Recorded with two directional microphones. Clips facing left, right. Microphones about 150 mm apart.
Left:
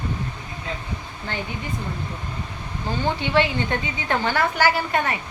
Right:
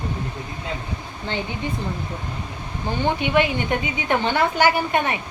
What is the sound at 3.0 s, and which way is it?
A woman's voice, 15° right (ahead or behind).